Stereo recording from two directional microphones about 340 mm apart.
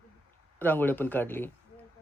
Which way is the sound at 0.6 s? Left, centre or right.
Centre.